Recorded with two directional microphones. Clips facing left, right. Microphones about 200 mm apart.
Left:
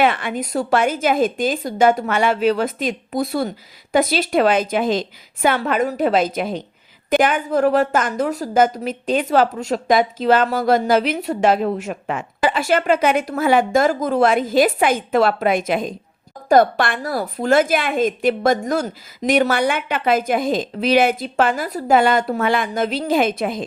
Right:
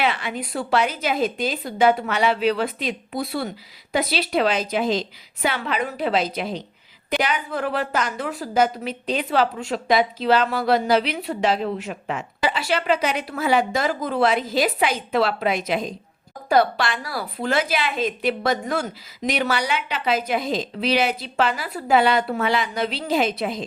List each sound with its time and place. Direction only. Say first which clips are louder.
0.0 s a woman's voice: left 6 dB; 50° left (ahead or behind)